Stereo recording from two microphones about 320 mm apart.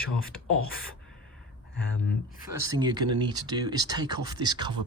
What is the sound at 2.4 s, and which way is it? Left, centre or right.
Speech, centre.